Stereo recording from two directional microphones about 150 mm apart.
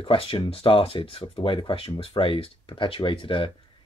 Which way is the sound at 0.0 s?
40° left (ahead or behind).